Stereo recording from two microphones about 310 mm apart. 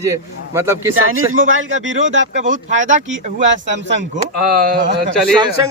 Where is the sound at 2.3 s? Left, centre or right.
Right.